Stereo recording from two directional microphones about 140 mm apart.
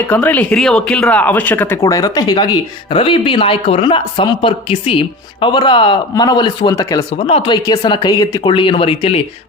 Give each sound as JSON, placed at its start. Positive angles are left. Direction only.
{"t": 0.1, "sound": "speech", "side_deg": 10}
{"t": 7.3, "sound": "speech", "side_deg": 40}
{"t": 8.5, "sound": "speech", "side_deg": 40}